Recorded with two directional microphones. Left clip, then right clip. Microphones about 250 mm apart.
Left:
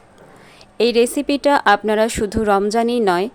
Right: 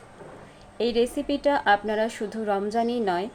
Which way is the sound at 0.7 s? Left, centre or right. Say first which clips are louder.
Left 9 dB; left.